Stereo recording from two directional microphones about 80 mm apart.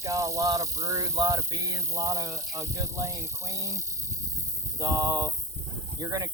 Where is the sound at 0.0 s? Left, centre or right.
Right.